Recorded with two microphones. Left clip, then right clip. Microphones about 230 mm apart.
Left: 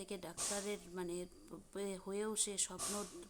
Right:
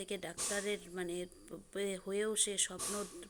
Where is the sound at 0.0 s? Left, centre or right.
Centre.